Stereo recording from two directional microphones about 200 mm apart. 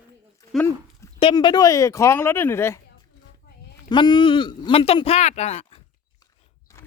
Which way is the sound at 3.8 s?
20° left (ahead or behind).